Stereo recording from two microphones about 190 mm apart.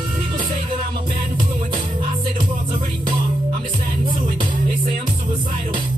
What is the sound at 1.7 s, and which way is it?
Music, 25° right (ahead or behind).